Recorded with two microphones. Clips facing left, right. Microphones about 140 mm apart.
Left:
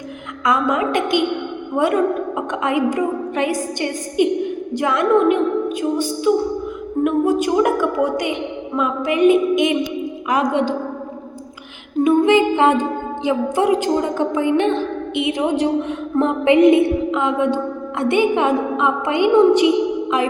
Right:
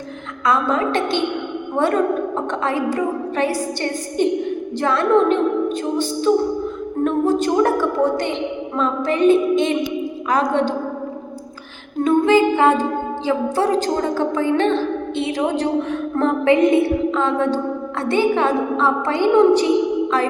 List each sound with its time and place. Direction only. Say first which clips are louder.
0.4 s a woman's voice: even; 15° left (ahead or behind)
12.0 s music: even; 20° left (ahead or behind)
13.2 s a woman's voice: left 2 dB; 15° left (ahead or behind)